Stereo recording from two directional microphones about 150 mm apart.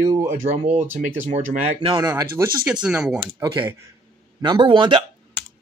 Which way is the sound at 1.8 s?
30° right (ahead or behind).